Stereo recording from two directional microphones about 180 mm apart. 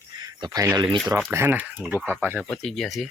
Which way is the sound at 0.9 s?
Centre (ahead or behind).